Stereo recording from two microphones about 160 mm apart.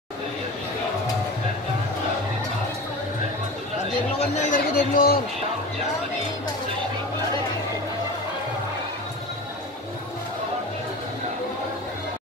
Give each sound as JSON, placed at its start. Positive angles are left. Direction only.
{"t": 4.4, "sound": "speech", "side_deg": 55}